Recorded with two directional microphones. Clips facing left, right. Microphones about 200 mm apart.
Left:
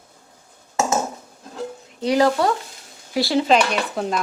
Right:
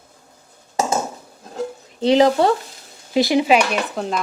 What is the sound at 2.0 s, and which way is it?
A woman's voice, 25° right (ahead or behind).